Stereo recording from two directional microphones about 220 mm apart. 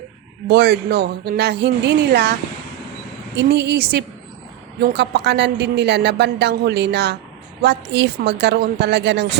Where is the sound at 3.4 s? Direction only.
50° right (ahead or behind).